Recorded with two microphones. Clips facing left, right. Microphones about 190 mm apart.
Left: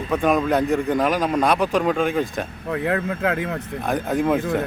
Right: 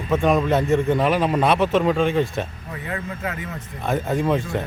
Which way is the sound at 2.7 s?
65° left (ahead or behind).